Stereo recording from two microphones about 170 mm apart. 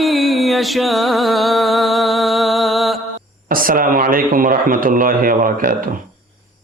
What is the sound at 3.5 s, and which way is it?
Speech, 55° right (ahead or behind).